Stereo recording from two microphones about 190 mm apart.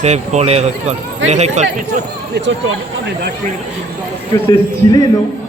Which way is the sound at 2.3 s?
70° right (ahead or behind).